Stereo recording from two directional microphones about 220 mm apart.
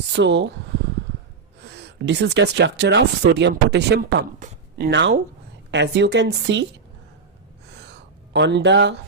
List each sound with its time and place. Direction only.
0.1 s speech: 50° right (ahead or behind)
1.6 s speech: 50° right (ahead or behind)
7.7 s gasp: 50° right (ahead or behind)